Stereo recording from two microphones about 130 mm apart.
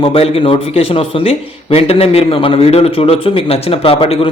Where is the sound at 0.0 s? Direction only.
45° left (ahead or behind).